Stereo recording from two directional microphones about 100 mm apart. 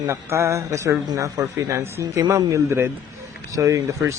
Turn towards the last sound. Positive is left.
turn(degrees=-30)  # may be behind; listen again after turning